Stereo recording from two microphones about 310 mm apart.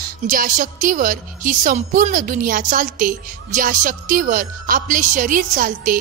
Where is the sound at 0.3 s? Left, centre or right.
Right.